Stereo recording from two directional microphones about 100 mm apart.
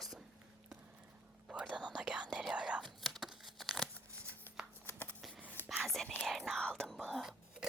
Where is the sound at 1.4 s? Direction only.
10° right (ahead or behind).